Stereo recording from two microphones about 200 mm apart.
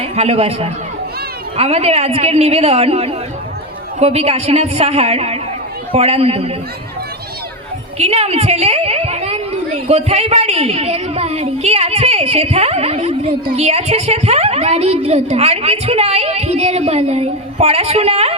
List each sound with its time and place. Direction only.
0.0 s a woman's voice: 30° right (ahead or behind)
7.9 s a woman's voice: 30° right (ahead or behind)